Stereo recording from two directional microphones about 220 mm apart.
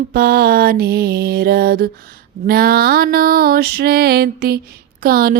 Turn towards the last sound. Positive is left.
turn(degrees=-45)  # may be behind; listen again after turning